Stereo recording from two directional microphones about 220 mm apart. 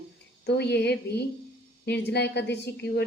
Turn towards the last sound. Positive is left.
turn(degrees=50)  # may be behind; listen again after turning